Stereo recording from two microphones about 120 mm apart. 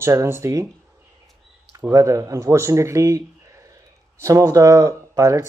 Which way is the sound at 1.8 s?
25° right (ahead or behind).